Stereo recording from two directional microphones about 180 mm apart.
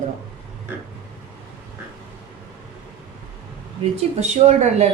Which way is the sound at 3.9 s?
40° right (ahead or behind).